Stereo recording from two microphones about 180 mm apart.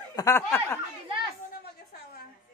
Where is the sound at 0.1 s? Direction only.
15° left (ahead or behind).